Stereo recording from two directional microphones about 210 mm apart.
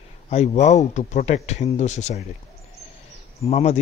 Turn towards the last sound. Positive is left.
turn(degrees=30)  # may be behind; listen again after turning